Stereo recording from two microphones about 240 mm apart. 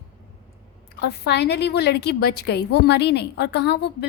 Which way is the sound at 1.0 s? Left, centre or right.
Left.